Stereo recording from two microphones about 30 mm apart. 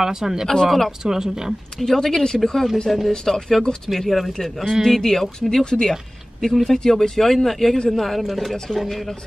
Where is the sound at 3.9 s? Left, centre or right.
Centre.